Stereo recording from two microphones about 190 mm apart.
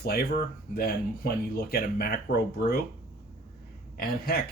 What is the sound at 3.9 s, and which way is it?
Speech, 50° left (ahead or behind).